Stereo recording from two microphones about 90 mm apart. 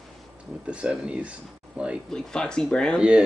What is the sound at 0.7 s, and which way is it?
Speech, 10° right (ahead or behind).